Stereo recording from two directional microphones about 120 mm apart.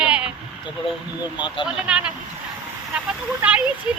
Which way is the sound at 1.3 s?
40° left (ahead or behind).